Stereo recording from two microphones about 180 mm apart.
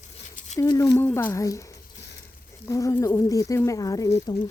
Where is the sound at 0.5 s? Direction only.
20° left (ahead or behind).